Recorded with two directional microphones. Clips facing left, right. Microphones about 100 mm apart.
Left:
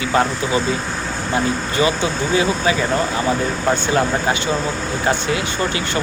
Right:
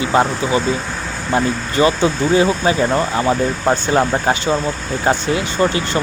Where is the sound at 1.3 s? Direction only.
40° right (ahead or behind).